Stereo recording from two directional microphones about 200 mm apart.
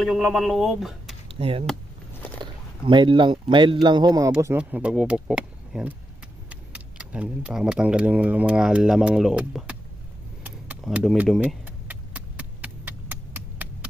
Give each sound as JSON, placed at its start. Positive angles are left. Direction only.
{"t": 0.0, "sound": "speech", "side_deg": 0}
{"t": 1.3, "sound": "speech", "side_deg": -30}
{"t": 2.8, "sound": "speech", "side_deg": -25}
{"t": 10.4, "sound": "keys jangling", "side_deg": -5}